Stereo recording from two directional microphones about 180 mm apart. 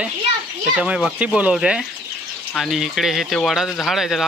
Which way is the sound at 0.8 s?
5° right (ahead or behind).